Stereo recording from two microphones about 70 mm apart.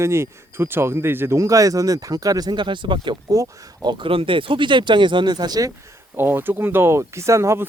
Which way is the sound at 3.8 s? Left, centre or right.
Right.